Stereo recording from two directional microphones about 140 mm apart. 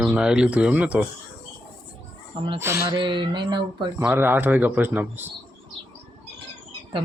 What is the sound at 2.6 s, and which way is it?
Speech, 20° right (ahead or behind).